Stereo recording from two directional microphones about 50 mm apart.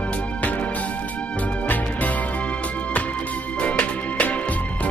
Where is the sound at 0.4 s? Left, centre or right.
Left.